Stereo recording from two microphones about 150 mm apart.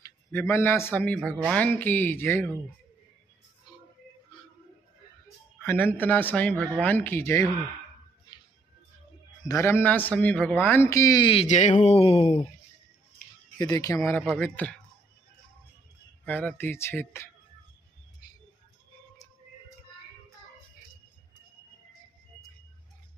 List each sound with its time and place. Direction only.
0.0 s a man's voice: 20° left (ahead or behind)
5.6 s a man's voice: 15° left (ahead or behind)
9.5 s a man's voice: 15° left (ahead or behind)
11.4 s speech: 55° left (ahead or behind)
13.6 s speech: 25° left (ahead or behind)
14.1 s a man's voice: 10° left (ahead or behind)
16.3 s a man's voice: 10° left (ahead or behind)